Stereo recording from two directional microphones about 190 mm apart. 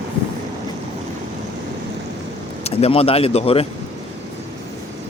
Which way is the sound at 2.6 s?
30° left (ahead or behind).